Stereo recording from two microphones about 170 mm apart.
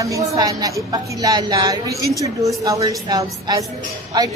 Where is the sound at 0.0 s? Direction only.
20° right (ahead or behind).